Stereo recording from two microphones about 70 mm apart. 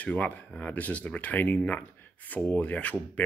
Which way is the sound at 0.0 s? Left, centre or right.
Left.